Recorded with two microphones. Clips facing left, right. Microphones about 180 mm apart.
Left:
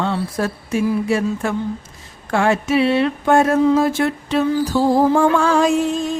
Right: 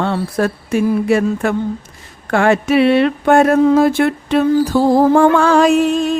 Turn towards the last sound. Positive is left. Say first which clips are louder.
# right 5 dB
turn(degrees=-70)  # may be behind; listen again after turning